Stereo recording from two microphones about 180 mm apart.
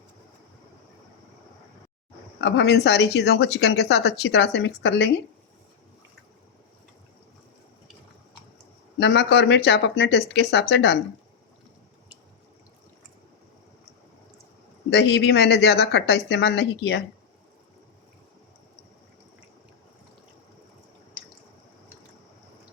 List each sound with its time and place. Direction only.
2.4 s a woman's voice: 70° left (ahead or behind)
9.0 s a woman's voice: 75° left (ahead or behind)
14.8 s a woman's voice: 70° left (ahead or behind)